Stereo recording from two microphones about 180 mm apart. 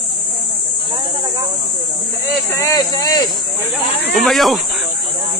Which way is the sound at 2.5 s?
20° left (ahead or behind).